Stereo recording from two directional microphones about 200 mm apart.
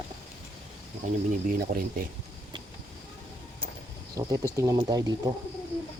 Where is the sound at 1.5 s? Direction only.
45° right (ahead or behind).